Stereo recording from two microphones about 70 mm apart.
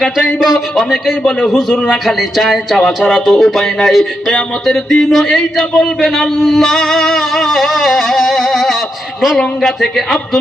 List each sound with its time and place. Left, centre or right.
0.3 s a man's voice: centre